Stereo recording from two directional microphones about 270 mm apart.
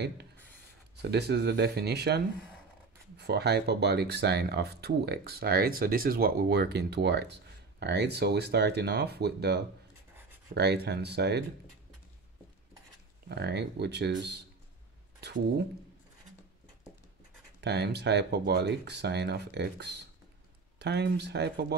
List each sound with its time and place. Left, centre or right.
0.9 s speech: right
13.3 s speech: right
17.6 s speech: right